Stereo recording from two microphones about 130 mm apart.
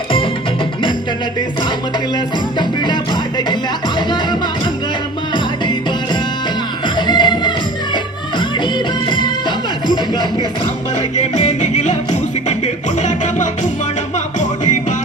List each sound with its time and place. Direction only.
2.1 s music: 35° left (ahead or behind)
6.8 s music: 35° left (ahead or behind)
11.2 s music: 60° left (ahead or behind)
13.0 s music: 65° left (ahead or behind)